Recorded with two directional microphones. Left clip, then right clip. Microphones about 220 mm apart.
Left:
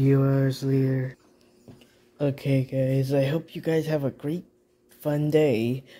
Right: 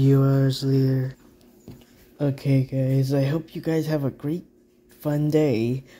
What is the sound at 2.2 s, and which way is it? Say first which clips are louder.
Speech: right 1 dB; 5° left (ahead or behind).